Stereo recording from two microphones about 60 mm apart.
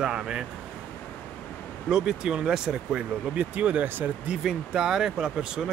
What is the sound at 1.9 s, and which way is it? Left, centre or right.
Speech, centre.